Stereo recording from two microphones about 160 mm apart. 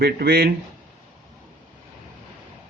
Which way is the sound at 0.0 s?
80° right.